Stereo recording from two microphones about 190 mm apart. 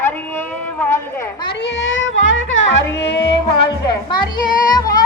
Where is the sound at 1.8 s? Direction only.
80° left.